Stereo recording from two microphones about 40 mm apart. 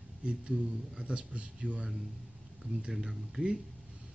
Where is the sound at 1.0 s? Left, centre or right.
Right.